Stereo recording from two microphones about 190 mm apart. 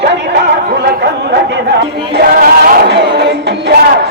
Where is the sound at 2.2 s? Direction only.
50° right (ahead or behind).